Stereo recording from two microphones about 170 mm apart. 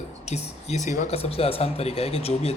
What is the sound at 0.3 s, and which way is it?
Speech, 40° left (ahead or behind).